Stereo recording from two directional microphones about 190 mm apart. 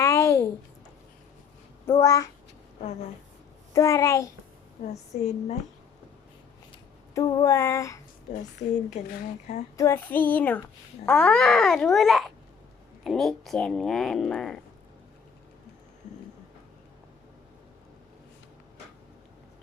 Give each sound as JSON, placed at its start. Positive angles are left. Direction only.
{"t": 0.0, "sound": "a sound", "side_deg": 15}
{"t": 1.9, "sound": "child singing", "side_deg": 15}
{"t": 3.7, "sound": "child singing", "side_deg": 15}
{"t": 4.8, "sound": "speech", "side_deg": 40}
{"t": 6.7, "sound": "a sound", "side_deg": 20}
{"t": 8.3, "sound": "speech", "side_deg": 40}
{"t": 9.7, "sound": "child singing", "side_deg": 15}
{"t": 11.0, "sound": "speech", "side_deg": 5}